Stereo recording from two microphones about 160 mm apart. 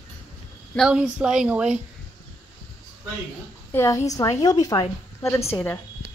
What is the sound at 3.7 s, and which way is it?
A woman's voice, 20° left (ahead or behind).